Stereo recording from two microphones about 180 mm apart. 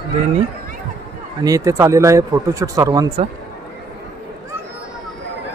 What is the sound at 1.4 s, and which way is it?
Speech, 20° right (ahead or behind).